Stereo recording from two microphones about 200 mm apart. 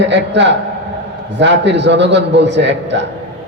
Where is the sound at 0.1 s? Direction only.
65° right (ahead or behind).